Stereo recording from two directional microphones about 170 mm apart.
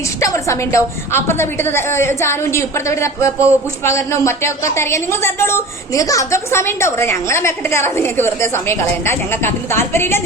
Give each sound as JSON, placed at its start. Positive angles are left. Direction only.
{"t": 0.2, "sound": "a woman's voice", "side_deg": 20}